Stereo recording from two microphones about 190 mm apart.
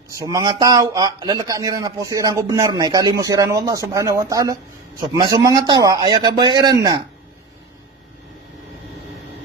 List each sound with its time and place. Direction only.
0.2 s a man's voice: 20° right (ahead or behind)